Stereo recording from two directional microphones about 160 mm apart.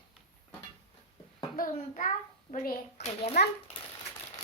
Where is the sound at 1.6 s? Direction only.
55° left (ahead or behind).